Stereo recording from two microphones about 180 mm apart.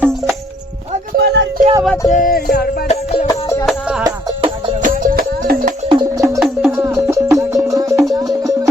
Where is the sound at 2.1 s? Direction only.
50° left (ahead or behind).